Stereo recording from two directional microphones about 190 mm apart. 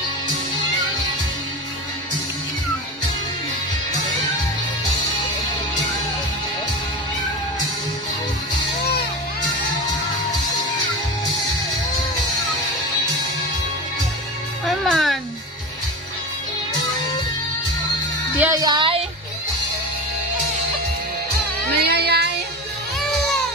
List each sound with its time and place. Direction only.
14.7 s music: centre (ahead or behind)
18.4 s music: 20° right (ahead or behind)
21.7 s music: 55° right (ahead or behind)